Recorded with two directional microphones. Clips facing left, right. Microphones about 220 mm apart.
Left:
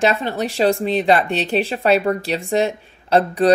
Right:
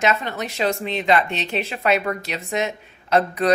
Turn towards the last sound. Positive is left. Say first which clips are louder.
# left 4 dB
turn(degrees=30)  # may be behind; listen again after turning